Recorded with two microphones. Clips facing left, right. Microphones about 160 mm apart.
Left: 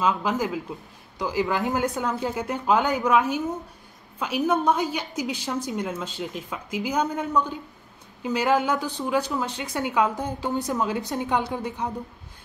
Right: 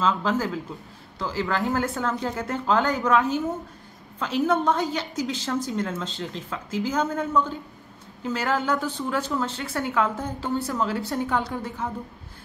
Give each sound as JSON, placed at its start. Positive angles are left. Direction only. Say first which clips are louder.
{"t": 0.0, "sound": "speech", "louder": "even", "side_deg": 15}